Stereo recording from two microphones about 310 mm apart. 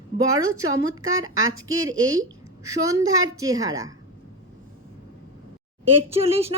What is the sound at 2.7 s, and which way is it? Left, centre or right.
A woman's voice, centre.